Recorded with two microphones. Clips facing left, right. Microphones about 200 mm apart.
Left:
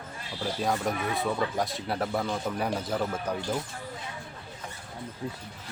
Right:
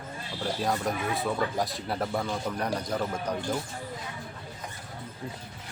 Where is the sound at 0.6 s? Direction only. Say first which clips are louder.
Left 1 dB; centre (ahead or behind).